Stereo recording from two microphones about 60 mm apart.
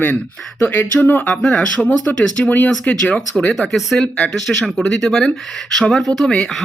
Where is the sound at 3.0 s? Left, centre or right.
Centre.